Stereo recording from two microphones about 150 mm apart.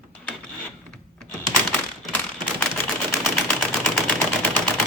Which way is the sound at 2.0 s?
5° left (ahead or behind).